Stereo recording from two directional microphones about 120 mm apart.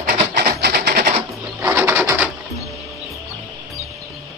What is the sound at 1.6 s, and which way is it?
Bird, 20° right (ahead or behind).